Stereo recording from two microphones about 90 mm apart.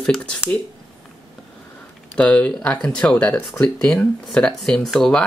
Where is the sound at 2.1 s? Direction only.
15° left (ahead or behind).